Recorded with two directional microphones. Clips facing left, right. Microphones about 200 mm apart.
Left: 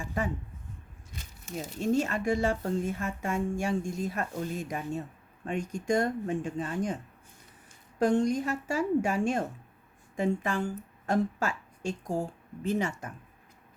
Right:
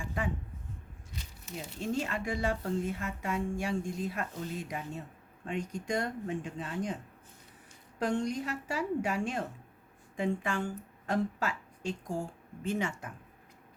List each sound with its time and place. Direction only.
0.0 s a sound: 40° left (ahead or behind)
1.1 s speech: 50° left (ahead or behind)
7.9 s a woman's voice: 45° left (ahead or behind)